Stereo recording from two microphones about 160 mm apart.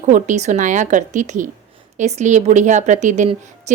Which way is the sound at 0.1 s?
45° right (ahead or behind).